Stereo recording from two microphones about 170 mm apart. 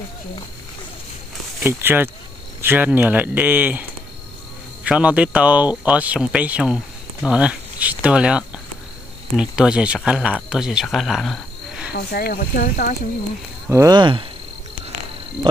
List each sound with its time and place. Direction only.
1.6 s speech: 15° right (ahead or behind)
4.8 s speech: 5° right (ahead or behind)
11.9 s speech: 65° left (ahead or behind)
13.7 s speech: 20° right (ahead or behind)